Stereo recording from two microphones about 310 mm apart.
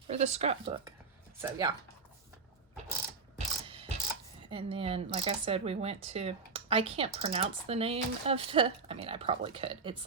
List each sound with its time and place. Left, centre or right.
0.1 s speech: right
3.3 s mechanisms: centre
4.4 s speech: centre